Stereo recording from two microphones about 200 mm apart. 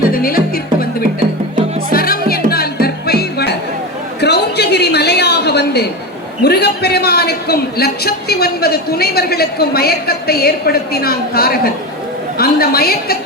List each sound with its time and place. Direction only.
0.1 s music: 45° left (ahead or behind)
4.2 s a sound: 55° left (ahead or behind)
6.4 s a man's voice: 55° left (ahead or behind)